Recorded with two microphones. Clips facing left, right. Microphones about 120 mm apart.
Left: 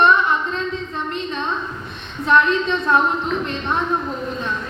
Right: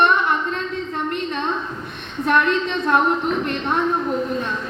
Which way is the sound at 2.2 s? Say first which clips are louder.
Left 2 dB; 60° right (ahead or behind).